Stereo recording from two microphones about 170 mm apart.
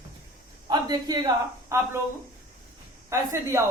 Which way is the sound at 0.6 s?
25° right (ahead or behind).